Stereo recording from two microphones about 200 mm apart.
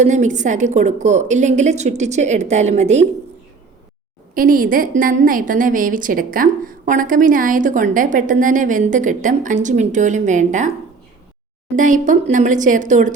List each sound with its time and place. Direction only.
0.0 s a woman's voice: 35° right (ahead or behind)
4.4 s a woman's voice: 45° right (ahead or behind)
11.8 s a woman's voice: 40° right (ahead or behind)